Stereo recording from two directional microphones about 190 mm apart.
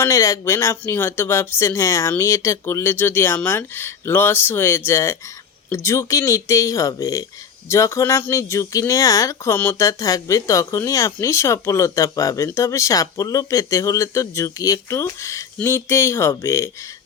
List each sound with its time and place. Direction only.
0.0 s speech: 15° left (ahead or behind)